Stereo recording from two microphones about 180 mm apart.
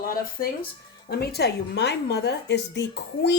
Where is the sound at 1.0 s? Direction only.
65° left (ahead or behind).